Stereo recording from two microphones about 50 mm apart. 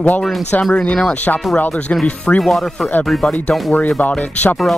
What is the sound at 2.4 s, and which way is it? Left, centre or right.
Speech, centre.